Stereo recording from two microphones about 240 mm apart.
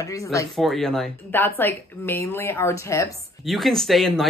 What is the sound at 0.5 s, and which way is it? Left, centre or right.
A woman's voice, centre.